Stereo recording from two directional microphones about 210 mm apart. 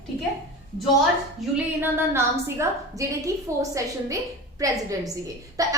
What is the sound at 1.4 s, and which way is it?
Female singing, centre (ahead or behind).